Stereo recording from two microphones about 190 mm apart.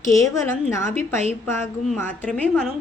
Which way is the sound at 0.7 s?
15° left (ahead or behind).